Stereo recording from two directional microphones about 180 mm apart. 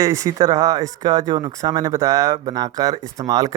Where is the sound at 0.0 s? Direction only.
15° right (ahead or behind).